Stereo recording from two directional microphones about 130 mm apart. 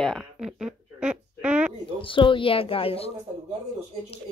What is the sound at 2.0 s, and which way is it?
A child's voice, 40° left (ahead or behind).